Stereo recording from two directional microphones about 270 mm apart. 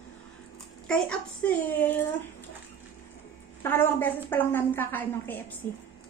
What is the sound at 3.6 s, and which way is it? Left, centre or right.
Speech, centre.